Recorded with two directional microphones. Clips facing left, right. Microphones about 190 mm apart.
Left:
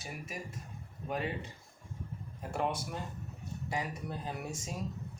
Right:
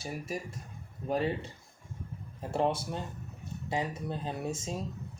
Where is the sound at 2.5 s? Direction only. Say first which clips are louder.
Right 5 dB; 30° right (ahead or behind).